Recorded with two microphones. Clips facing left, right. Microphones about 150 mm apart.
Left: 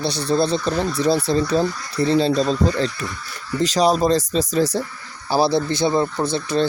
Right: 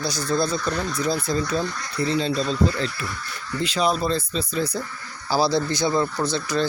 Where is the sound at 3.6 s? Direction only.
40° left (ahead or behind).